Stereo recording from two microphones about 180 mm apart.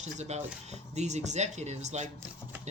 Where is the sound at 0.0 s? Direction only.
40° right (ahead or behind).